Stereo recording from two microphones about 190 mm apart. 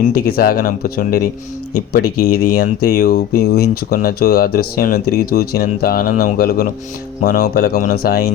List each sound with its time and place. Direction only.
0.3 s speech: 50° left (ahead or behind)